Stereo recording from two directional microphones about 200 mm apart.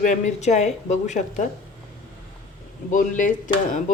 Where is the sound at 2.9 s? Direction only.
40° left (ahead or behind).